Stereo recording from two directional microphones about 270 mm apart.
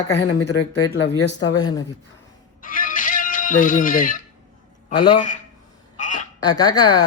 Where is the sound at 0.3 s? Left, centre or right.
Left.